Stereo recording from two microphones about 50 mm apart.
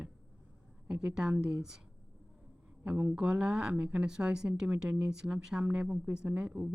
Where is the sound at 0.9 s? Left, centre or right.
Centre.